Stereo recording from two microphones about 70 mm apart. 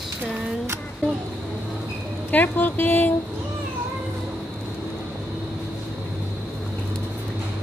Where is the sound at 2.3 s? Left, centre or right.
Left.